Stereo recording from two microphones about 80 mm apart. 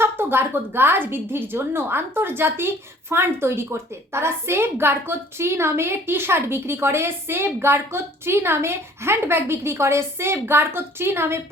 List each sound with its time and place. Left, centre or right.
0.0 s a woman's voice: right